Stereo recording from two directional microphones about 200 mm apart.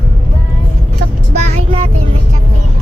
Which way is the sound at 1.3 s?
35° right (ahead or behind).